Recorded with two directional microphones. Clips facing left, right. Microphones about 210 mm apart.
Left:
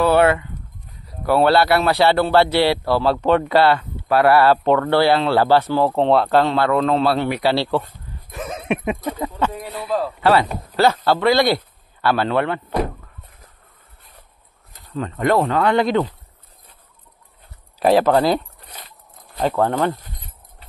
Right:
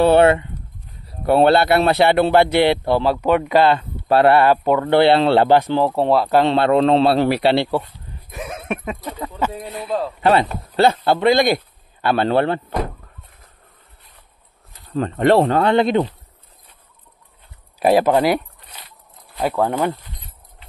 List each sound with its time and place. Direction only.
0.0 s a man's voice: 25° right (ahead or behind)
5.9 s speech: 5° right (ahead or behind)
6.3 s a man's voice: 25° right (ahead or behind)
7.5 s speech: 15° right (ahead or behind)
8.8 s speech: 15° left (ahead or behind)
9.6 s a man's voice: 25° right (ahead or behind)
12.3 s a man's voice: 30° right (ahead or behind)
15.0 s a man's voice: 30° right (ahead or behind)
17.7 s speech: 10° right (ahead or behind)
19.4 s speech: 10° right (ahead or behind)